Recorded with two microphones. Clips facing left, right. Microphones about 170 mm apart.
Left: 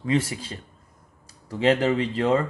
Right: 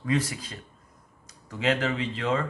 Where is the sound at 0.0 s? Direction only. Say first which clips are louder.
Left 3 dB; 25° left (ahead or behind).